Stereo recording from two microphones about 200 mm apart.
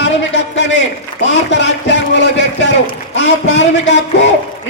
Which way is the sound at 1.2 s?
60° left (ahead or behind).